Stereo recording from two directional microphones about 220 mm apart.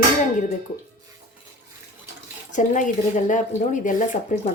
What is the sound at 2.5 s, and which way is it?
A woman's voice, 35° left (ahead or behind).